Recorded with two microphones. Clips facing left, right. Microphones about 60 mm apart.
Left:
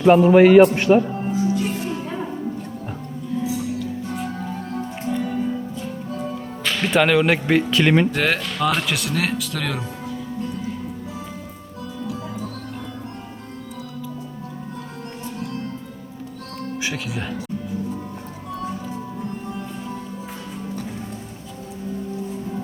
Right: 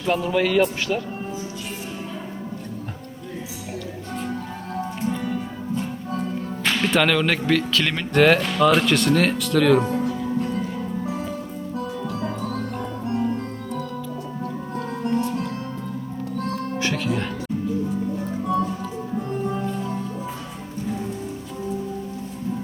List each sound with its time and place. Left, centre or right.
0.0 s a man's voice: left
1.3 s music: left
6.8 s speech: centre
8.1 s speech: centre
16.7 s music: centre